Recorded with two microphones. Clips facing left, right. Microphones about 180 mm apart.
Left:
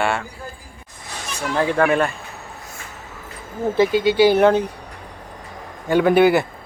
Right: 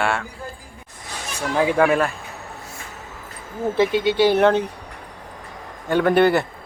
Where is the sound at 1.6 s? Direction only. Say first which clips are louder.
Even; 10° right (ahead or behind).